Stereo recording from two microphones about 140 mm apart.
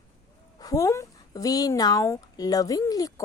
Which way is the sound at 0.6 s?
25° left (ahead or behind).